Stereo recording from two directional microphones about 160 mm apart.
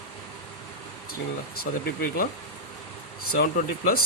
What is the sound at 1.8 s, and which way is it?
Speech, 65° left (ahead or behind).